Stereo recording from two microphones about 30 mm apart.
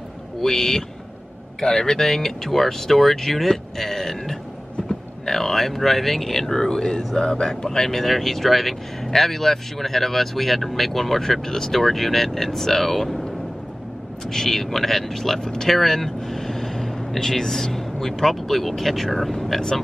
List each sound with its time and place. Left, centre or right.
0.4 s speech: centre
8.0 s speech: centre
14.3 s speech: centre
19.3 s speech: centre